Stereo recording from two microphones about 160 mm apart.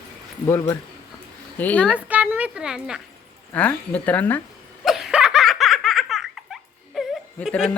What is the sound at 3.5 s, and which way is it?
Speech, 10° left (ahead or behind).